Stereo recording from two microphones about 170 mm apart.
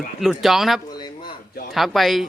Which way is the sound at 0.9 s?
25° left (ahead or behind).